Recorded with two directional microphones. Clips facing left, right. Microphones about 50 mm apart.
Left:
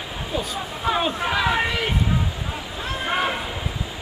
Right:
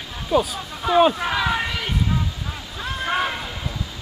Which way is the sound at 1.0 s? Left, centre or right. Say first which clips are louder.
Right 8 dB; centre.